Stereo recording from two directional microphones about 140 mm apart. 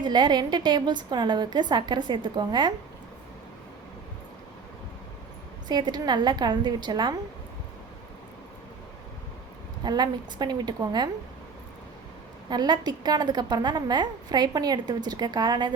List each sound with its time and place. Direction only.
0.0 s a woman's voice: 30° right (ahead or behind)
5.6 s a woman's voice: 30° right (ahead or behind)
9.8 s a woman's voice: 30° right (ahead or behind)
12.5 s a woman's voice: 30° right (ahead or behind)